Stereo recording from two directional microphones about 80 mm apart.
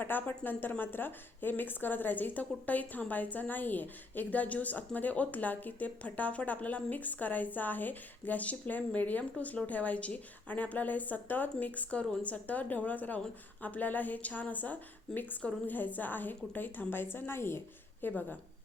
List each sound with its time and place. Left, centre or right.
0.0 s a woman's voice: left